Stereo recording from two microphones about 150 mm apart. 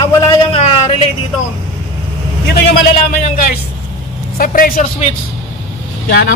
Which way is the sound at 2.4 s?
90° left.